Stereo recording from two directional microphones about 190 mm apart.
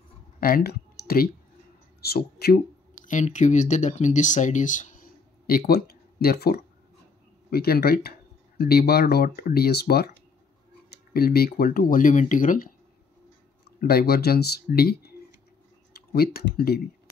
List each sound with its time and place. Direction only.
0.4 s speech: 50° left (ahead or behind)
13.7 s speech: 55° left (ahead or behind)